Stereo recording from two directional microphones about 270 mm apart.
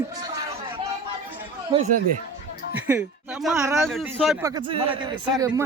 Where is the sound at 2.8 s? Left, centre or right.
Centre.